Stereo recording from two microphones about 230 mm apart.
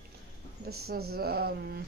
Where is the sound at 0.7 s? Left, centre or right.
Right.